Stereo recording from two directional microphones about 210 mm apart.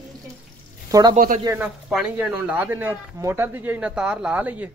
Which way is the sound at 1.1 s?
40° right (ahead or behind).